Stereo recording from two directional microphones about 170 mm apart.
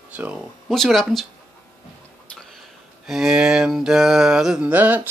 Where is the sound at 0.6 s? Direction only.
Centre (ahead or behind).